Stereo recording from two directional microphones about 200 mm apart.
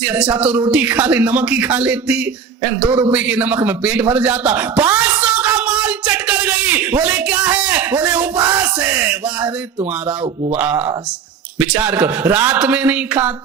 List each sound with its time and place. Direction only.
0.1 s a man's voice: 5° right (ahead or behind)
10.5 s speech: 10° right (ahead or behind)